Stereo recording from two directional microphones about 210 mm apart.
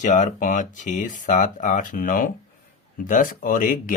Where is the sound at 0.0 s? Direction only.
35° left (ahead or behind).